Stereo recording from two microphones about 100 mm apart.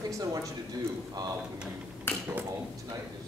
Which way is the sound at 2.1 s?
20° left (ahead or behind).